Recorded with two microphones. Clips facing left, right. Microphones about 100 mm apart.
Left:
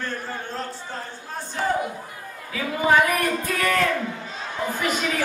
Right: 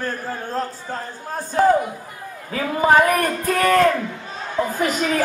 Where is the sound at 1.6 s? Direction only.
45° right (ahead or behind).